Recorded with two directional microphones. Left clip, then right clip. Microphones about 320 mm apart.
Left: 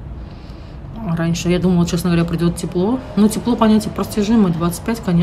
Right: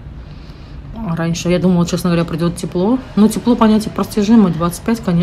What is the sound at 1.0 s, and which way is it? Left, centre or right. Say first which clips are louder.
Speech: right 1 dB; centre.